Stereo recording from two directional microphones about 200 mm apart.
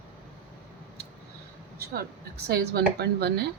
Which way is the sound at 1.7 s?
50° right (ahead or behind).